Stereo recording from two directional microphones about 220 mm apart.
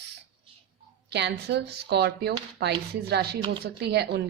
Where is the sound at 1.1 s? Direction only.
50° right (ahead or behind).